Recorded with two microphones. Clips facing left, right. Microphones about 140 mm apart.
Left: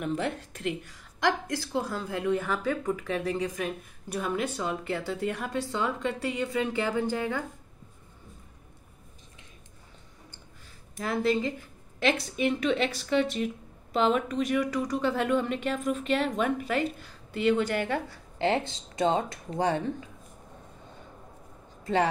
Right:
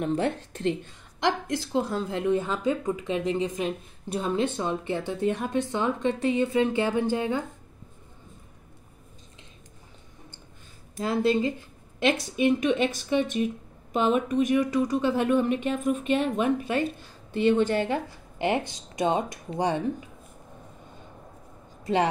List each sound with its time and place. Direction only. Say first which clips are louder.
0.0 s a woman's voice: right 4 dB; 30° right (ahead or behind)
11.0 s a woman's voice: right 3 dB; 20° right (ahead or behind)